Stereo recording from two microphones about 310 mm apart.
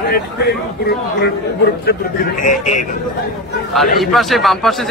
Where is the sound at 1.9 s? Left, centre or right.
Left.